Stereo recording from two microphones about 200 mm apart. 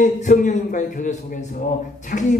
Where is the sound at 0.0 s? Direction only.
40° left (ahead or behind).